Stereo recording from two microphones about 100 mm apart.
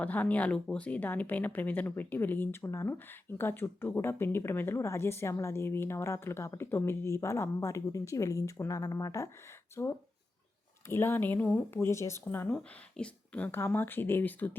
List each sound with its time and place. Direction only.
0.0 s a woman's voice: 15° left (ahead or behind)
12.5 s speech: 10° left (ahead or behind)